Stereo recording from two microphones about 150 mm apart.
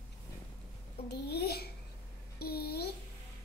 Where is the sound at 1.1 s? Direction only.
90° left.